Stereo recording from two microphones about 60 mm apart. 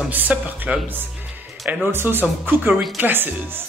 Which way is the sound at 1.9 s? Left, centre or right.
Right.